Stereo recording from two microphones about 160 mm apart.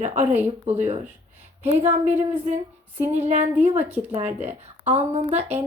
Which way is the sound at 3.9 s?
10° right (ahead or behind).